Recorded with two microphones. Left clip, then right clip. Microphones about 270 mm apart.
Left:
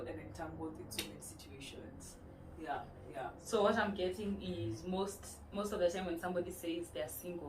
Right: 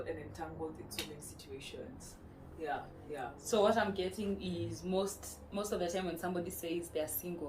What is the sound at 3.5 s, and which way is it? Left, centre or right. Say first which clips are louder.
Speech: right 3 dB; right.